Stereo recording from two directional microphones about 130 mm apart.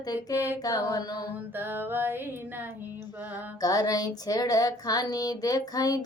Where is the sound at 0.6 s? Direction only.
30° left (ahead or behind).